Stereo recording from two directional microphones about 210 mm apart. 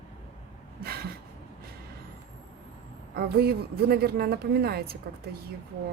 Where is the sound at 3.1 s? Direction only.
45° right (ahead or behind).